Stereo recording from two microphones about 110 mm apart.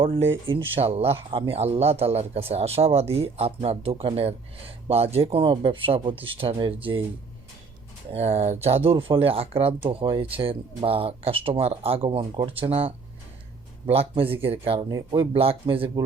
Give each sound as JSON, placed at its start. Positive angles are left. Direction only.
{"t": 0.8, "sound": "speech", "side_deg": -65}
{"t": 8.1, "sound": "speech", "side_deg": -70}
{"t": 8.6, "sound": "speech", "side_deg": -65}
{"t": 14.8, "sound": "speech", "side_deg": -40}
{"t": 15.3, "sound": "speech", "side_deg": -60}